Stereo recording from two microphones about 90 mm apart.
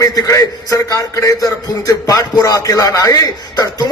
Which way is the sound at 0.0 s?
40° left (ahead or behind).